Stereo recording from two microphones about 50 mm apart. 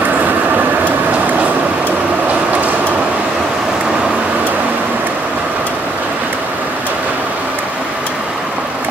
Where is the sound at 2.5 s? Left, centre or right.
Right.